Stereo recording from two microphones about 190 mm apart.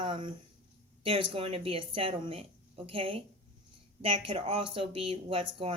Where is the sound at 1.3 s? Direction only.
30° right (ahead or behind).